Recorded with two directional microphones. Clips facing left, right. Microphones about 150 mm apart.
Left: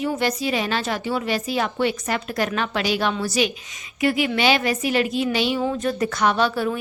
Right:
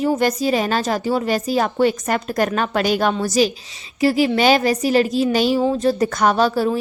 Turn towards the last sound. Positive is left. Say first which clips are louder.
# right 4 dB
turn(degrees=-40)  # may be behind; listen again after turning